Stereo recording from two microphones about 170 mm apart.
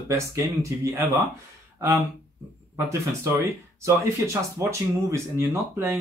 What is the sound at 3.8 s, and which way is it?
Speech, 15° right (ahead or behind).